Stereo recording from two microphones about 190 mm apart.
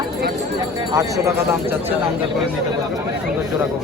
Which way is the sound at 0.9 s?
15° right (ahead or behind).